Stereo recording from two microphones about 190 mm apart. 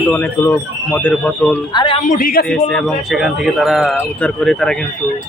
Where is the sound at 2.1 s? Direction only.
45° left (ahead or behind).